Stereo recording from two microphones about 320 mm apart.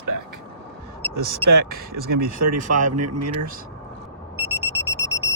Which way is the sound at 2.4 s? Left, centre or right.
Right.